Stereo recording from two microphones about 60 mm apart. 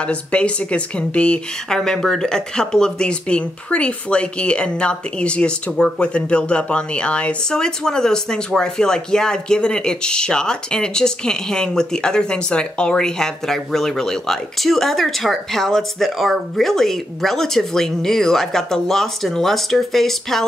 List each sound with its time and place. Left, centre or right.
0.0 s a woman's voice: centre